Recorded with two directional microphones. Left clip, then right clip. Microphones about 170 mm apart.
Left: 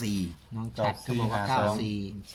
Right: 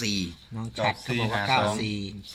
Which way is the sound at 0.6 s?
25° right (ahead or behind).